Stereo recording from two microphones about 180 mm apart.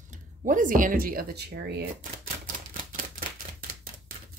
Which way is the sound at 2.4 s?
50° right (ahead or behind).